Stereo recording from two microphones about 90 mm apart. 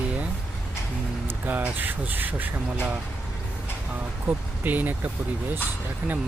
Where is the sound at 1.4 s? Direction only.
20° right (ahead or behind).